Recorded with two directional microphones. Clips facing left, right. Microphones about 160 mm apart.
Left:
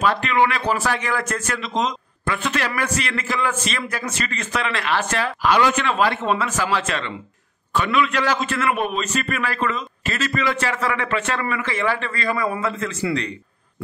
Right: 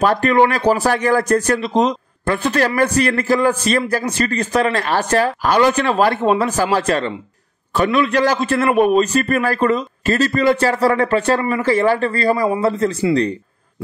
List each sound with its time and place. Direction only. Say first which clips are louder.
0.0 s speech: right 5 dB; 40° right (ahead or behind)